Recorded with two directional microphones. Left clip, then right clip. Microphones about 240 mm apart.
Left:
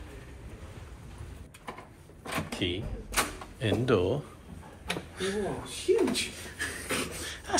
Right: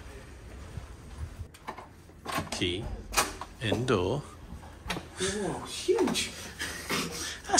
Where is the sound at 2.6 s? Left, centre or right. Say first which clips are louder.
Right 1 dB; right.